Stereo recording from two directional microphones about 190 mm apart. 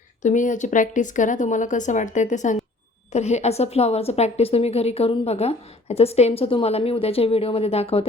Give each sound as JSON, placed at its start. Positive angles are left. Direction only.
{"t": 0.2, "sound": "a woman's voice", "side_deg": 40}